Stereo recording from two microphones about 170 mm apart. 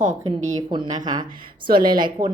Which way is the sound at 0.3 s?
25° right (ahead or behind).